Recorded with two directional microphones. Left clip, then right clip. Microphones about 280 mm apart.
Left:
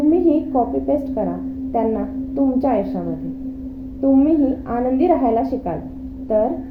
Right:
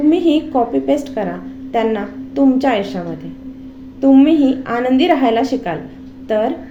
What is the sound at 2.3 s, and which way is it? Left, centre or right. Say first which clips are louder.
Speech: right 4 dB; right.